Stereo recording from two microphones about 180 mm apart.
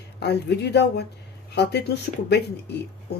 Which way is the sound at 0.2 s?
65° left (ahead or behind).